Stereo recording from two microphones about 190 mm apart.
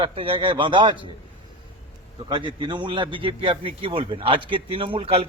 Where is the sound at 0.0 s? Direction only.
25° right (ahead or behind).